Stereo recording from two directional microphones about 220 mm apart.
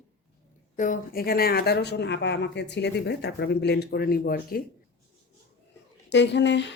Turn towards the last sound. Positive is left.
turn(degrees=55)  # may be behind; listen again after turning